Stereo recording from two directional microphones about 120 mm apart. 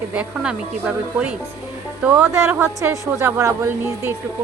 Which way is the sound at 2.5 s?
25° right (ahead or behind).